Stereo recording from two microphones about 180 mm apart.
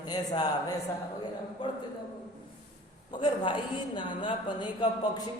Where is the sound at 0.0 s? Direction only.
20° left (ahead or behind).